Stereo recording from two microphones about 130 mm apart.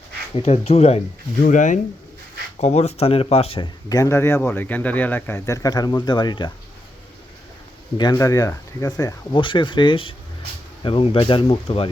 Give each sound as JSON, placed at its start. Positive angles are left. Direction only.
{"t": 0.3, "sound": "speech", "side_deg": 50}
{"t": 1.4, "sound": "speech", "side_deg": 85}
{"t": 2.6, "sound": "speech", "side_deg": 60}
{"t": 3.8, "sound": "speech", "side_deg": 25}
{"t": 7.9, "sound": "speech", "side_deg": 35}